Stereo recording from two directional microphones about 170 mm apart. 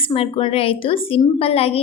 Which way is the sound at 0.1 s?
35° left (ahead or behind).